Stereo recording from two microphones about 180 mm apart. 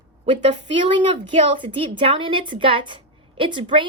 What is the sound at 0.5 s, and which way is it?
A woman's voice, 25° right (ahead or behind).